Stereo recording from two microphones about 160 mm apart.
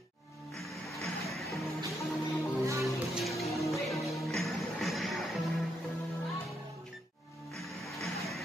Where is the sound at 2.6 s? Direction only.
20° right (ahead or behind).